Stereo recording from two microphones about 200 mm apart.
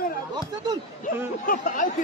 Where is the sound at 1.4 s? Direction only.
45° left (ahead or behind).